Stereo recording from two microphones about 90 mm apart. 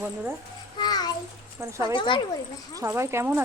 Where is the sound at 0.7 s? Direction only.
50° left (ahead or behind).